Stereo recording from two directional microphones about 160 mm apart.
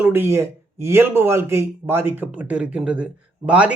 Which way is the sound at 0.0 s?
15° right (ahead or behind).